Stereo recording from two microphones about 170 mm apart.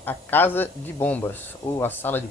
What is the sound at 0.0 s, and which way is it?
Speech, 10° left (ahead or behind).